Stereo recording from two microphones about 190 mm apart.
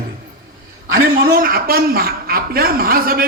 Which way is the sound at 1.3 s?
50° right (ahead or behind).